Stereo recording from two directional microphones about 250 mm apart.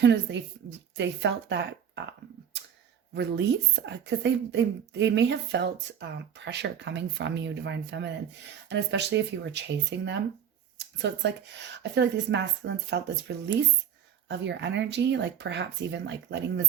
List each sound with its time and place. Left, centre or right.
0.0 s a woman's voice: right
3.2 s a woman's voice: right